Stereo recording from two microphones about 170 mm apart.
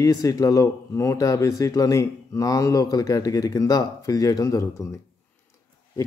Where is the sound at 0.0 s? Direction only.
20° left (ahead or behind).